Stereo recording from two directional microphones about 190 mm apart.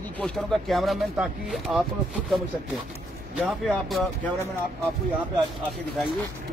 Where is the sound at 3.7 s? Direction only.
Centre (ahead or behind).